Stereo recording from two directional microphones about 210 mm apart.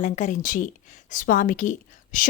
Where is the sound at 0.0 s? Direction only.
35° left (ahead or behind).